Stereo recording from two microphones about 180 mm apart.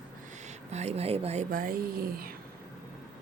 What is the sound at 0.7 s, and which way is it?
Speech, 35° right (ahead or behind).